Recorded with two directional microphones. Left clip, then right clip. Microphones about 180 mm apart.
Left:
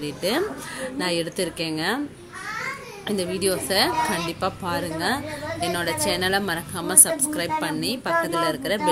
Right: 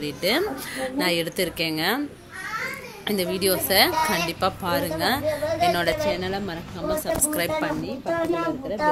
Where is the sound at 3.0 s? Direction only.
Centre (ahead or behind).